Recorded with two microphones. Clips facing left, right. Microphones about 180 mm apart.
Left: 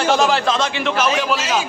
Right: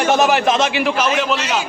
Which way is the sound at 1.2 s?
Centre (ahead or behind).